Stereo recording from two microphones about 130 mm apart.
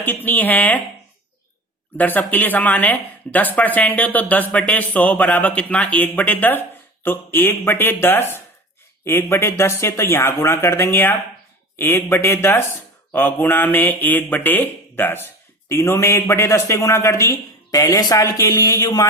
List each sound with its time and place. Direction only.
0.0 s speech: 15° left (ahead or behind)
2.0 s speech: 15° left (ahead or behind)
9.0 s speech: 20° left (ahead or behind)